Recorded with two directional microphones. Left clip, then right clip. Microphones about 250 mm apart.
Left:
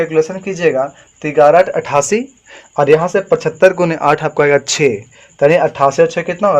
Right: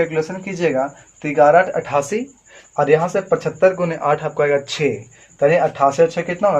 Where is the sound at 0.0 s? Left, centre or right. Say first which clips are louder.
Left 6 dB; left.